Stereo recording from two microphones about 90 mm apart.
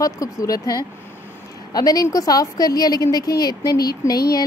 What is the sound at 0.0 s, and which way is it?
A woman's voice, 40° left (ahead or behind).